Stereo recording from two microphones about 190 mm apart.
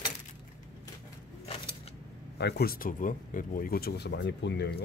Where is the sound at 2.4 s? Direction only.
55° left (ahead or behind).